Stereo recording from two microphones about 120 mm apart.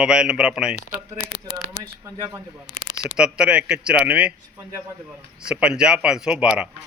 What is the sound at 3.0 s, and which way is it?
Speech, 5° right (ahead or behind).